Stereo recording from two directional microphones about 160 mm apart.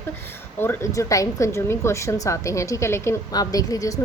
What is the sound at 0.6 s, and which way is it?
A woman's voice, 15° left (ahead or behind).